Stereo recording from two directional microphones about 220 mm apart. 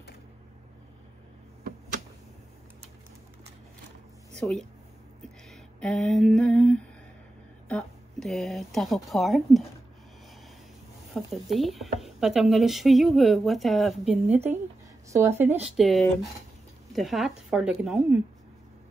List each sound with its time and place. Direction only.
4.4 s speech: 5° left (ahead or behind)
5.5 s a sound: centre (ahead or behind)
7.6 s speech: 5° left (ahead or behind)
11.1 s speech: centre (ahead or behind)
14.3 s speech: 30° right (ahead or behind)
15.0 s speech: 15° right (ahead or behind)
15.6 s speech: centre (ahead or behind)